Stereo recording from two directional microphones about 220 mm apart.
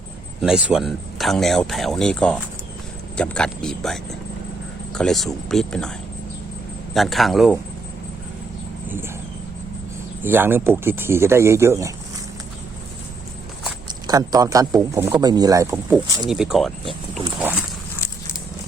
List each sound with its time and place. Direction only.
0.4 s speech: 5° right (ahead or behind)
6.9 s speech: centre (ahead or behind)
10.2 s speech: 10° right (ahead or behind)
14.1 s speech: 15° right (ahead or behind)
16.2 s speech: centre (ahead or behind)